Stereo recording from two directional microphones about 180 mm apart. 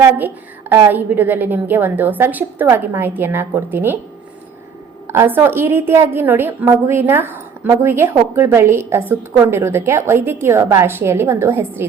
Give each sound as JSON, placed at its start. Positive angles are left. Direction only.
{"t": 0.0, "sound": "a woman's voice", "side_deg": -10}
{"t": 5.0, "sound": "a woman's voice", "side_deg": -15}